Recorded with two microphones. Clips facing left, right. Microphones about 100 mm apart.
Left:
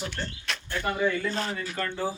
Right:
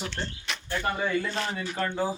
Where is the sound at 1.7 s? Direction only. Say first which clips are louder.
Right 2 dB; 15° right (ahead or behind).